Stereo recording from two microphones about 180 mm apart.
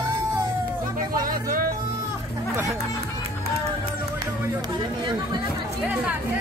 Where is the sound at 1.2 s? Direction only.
50° right (ahead or behind).